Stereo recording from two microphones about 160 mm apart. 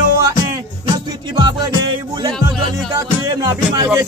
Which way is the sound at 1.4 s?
25° right (ahead or behind).